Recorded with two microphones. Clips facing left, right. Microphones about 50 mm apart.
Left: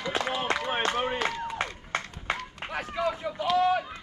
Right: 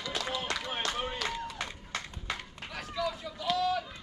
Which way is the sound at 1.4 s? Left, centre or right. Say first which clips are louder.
Left 7 dB; left.